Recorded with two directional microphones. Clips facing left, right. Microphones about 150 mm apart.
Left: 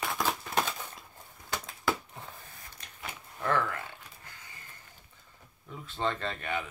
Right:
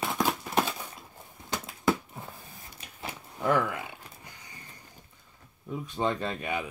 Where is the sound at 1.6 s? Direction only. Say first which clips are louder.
Right 6 dB; 5° right (ahead or behind).